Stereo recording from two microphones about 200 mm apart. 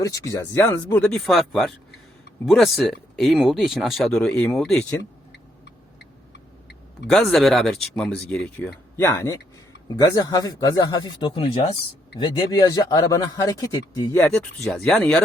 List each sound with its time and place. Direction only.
0.0 s speech: 15° left (ahead or behind)
7.1 s speech: centre (ahead or behind)